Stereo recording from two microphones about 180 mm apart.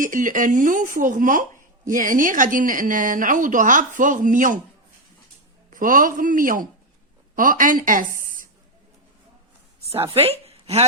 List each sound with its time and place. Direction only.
0.0 s a woman's voice: 45° right (ahead or behind)
5.7 s a woman's voice: 50° right (ahead or behind)
9.9 s speech: 35° right (ahead or behind)